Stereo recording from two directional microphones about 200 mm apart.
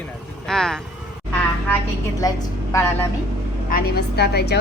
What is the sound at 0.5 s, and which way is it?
Speech, centre (ahead or behind).